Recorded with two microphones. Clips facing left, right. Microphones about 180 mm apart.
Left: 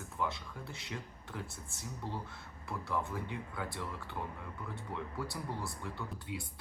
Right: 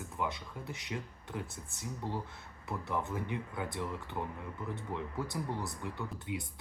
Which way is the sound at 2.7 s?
20° right (ahead or behind).